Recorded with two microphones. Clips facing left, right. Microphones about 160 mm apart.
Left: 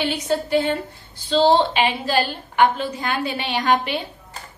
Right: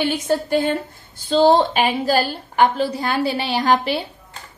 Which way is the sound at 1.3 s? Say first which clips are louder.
Right 2 dB; 45° right (ahead or behind).